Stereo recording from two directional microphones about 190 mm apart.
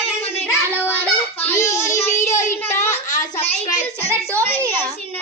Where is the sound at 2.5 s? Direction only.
10° left (ahead or behind).